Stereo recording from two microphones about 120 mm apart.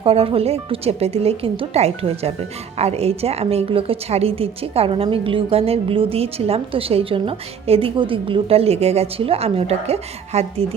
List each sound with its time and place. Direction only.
0.0 s a woman's voice: 55° right (ahead or behind)